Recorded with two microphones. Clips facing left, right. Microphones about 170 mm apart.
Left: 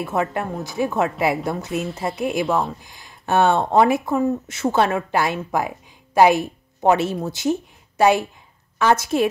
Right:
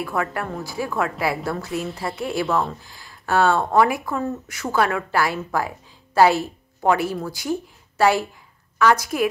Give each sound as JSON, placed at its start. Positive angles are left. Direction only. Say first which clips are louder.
{"t": 0.0, "sound": "speech", "louder": "left 2 dB", "side_deg": 20}
{"t": 2.4, "sound": "speech", "louder": "right 1 dB", "side_deg": 0}
{"t": 2.8, "sound": "a woman's voice", "louder": "left 1 dB", "side_deg": 20}